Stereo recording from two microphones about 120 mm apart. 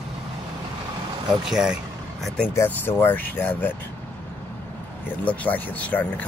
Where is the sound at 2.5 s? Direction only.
20° left (ahead or behind).